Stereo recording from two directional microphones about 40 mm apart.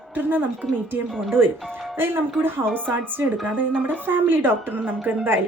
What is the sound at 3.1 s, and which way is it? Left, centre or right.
A woman's voice, right.